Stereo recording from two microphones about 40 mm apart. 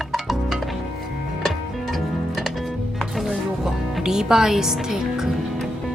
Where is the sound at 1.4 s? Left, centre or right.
Centre.